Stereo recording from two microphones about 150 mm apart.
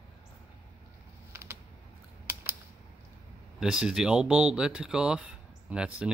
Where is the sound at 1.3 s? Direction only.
15° right (ahead or behind).